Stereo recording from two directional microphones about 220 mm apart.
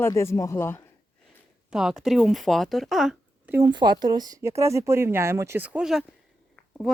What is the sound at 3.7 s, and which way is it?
Speech, 20° right (ahead or behind).